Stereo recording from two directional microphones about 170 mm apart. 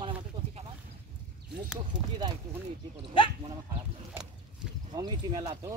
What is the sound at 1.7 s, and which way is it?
Speech, 25° right (ahead or behind).